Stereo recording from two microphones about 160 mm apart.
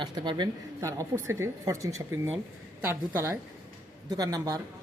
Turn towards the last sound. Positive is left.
turn(degrees=-20)  # may be behind; listen again after turning